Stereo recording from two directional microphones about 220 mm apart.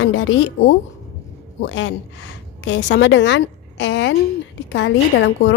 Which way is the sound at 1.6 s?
60° left (ahead or behind).